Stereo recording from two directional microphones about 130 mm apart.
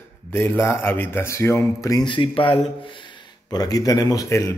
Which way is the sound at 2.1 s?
40° left (ahead or behind).